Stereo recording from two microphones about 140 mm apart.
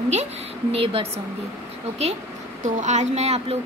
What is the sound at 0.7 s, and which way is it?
Speech, 45° right (ahead or behind).